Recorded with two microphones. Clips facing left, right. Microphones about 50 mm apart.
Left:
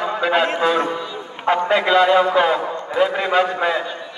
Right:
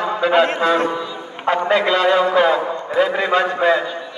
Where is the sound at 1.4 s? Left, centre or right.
Centre.